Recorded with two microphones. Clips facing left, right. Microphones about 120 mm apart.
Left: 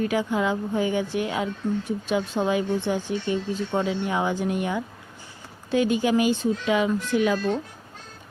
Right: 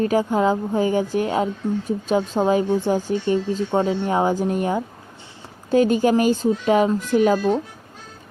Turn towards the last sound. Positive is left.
turn(degrees=-40)  # may be behind; listen again after turning